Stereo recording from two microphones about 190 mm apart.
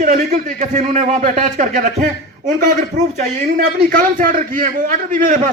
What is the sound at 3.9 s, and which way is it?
A man's voice, 45° right (ahead or behind).